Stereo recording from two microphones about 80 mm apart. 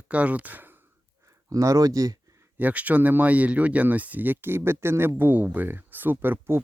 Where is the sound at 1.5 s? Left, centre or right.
Right.